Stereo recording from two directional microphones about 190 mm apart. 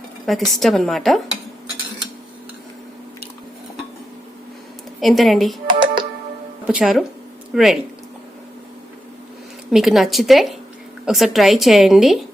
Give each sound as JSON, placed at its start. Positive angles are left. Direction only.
{"t": 0.3, "sound": "a woman's voice", "side_deg": 0}
{"t": 4.9, "sound": "a woman's voice", "side_deg": 0}
{"t": 5.6, "sound": "music", "side_deg": -25}
{"t": 6.7, "sound": "a woman's voice", "side_deg": -5}
{"t": 9.7, "sound": "a woman's voice", "side_deg": 0}